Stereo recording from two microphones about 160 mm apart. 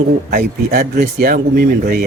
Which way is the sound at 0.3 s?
60° right (ahead or behind).